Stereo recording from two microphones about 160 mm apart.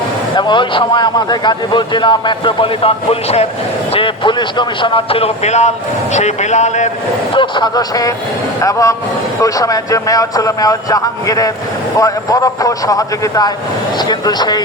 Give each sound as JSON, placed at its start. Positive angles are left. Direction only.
{"t": 0.3, "sound": "a man's voice", "side_deg": 30}
{"t": 7.3, "sound": "a man's voice", "side_deg": 25}